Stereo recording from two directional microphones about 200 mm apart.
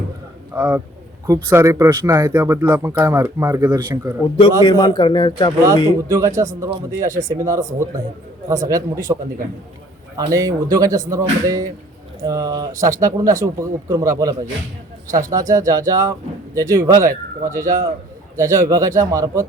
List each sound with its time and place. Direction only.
0.5 s speech: 10° right (ahead or behind)
4.6 s speech: 20° left (ahead or behind)
5.6 s speech: 15° right (ahead or behind)
10.2 s speech: 15° right (ahead or behind)